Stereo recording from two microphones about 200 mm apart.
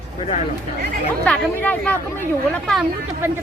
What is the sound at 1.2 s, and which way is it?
Speech, 10° left (ahead or behind).